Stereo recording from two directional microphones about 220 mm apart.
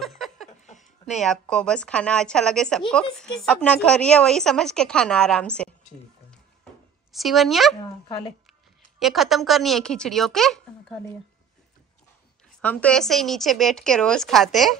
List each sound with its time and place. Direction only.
0.0 s a sound: centre (ahead or behind)
0.7 s a sound: 30° left (ahead or behind)
1.2 s a woman's voice: 5° left (ahead or behind)
7.1 s a woman's voice: centre (ahead or behind)
9.0 s a woman's voice: centre (ahead or behind)
12.6 s a woman's voice: 5° left (ahead or behind)